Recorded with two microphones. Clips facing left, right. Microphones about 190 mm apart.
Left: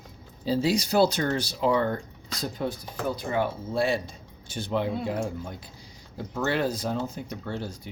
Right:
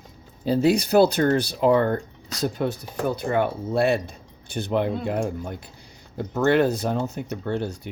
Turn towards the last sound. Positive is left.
turn(degrees=-60)  # may be behind; listen again after turning